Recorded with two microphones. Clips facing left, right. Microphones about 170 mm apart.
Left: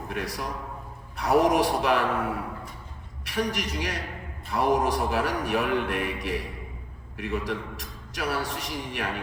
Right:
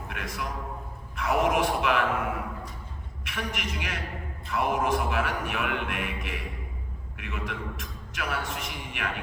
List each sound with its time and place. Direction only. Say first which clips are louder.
0.1 s a man's voice: left 3 dB; 35° left (ahead or behind)